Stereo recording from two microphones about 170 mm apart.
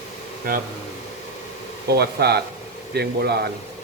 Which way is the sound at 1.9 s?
70° right (ahead or behind).